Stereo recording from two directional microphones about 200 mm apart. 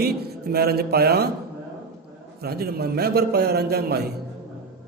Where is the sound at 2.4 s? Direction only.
50° right (ahead or behind).